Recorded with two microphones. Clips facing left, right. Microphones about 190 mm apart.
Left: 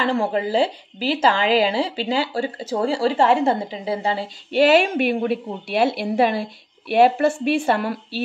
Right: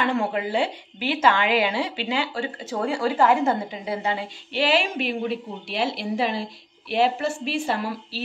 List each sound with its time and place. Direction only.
0.0 s a woman's voice: 30° left (ahead or behind)
4.5 s a woman's voice: 45° left (ahead or behind)